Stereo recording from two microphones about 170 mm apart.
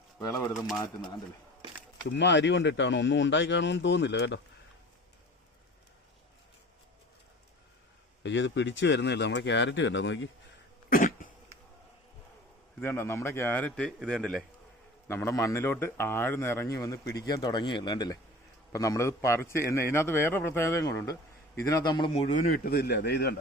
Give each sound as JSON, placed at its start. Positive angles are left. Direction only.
{"t": 0.2, "sound": "speech", "side_deg": 20}
{"t": 2.0, "sound": "speech", "side_deg": 90}
{"t": 8.2, "sound": "speech", "side_deg": 90}
{"t": 10.8, "sound": "cough", "side_deg": 55}
{"t": 12.8, "sound": "a man's voice", "side_deg": 15}
{"t": 15.0, "sound": "a man's voice", "side_deg": 15}
{"t": 22.1, "sound": "a man's voice", "side_deg": 55}